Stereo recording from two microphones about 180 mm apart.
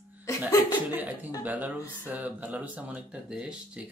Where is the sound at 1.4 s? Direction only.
10° right (ahead or behind).